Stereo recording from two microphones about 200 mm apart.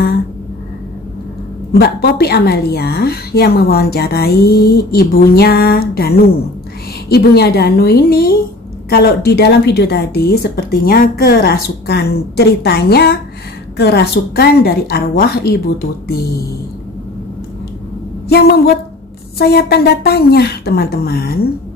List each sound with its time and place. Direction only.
1.7 s a woman's voice: 50° left (ahead or behind)
18.3 s a woman's voice: 55° left (ahead or behind)